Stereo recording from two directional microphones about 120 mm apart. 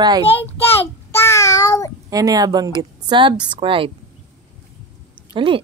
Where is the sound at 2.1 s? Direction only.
30° right (ahead or behind); by 3.9 s 50° right (ahead or behind).